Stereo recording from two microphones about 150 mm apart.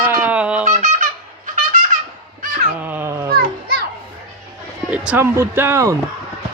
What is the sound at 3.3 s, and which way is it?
Children playing, 85° right.